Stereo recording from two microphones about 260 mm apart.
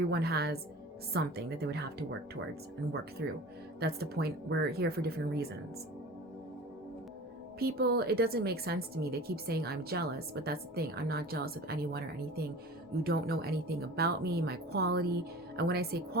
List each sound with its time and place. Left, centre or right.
0.1 s a woman's voice: right
7.6 s a woman's voice: right